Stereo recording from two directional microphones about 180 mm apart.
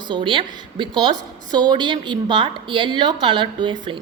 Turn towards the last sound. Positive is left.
turn(degrees=-25)  # may be behind; listen again after turning